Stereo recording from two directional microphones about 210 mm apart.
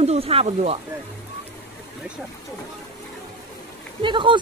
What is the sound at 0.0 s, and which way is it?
Speech, 30° right (ahead or behind).